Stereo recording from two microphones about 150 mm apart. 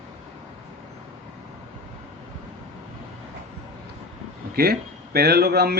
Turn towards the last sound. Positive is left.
turn(degrees=-90)